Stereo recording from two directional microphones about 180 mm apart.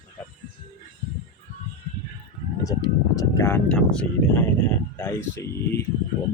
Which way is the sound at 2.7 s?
20° left (ahead or behind).